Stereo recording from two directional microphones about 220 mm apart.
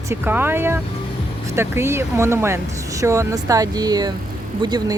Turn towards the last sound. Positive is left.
turn(degrees=-20)  # may be behind; listen again after turning